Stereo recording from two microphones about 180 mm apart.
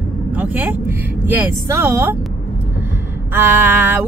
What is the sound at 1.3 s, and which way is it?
Speech, 10° right (ahead or behind).